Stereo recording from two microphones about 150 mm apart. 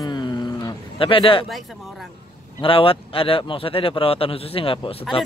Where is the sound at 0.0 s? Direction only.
30° left (ahead or behind).